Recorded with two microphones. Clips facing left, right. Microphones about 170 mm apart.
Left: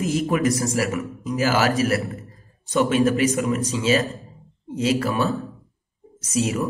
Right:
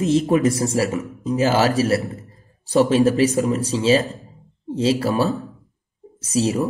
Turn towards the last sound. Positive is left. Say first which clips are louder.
# right 3 dB
turn(degrees=-35)  # may be behind; listen again after turning